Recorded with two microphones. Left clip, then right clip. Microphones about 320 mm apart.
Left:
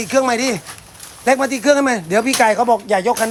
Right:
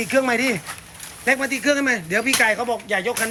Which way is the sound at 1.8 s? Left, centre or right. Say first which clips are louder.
Left 5 dB; centre.